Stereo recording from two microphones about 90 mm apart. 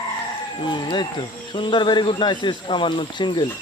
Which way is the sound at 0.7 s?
55° left (ahead or behind).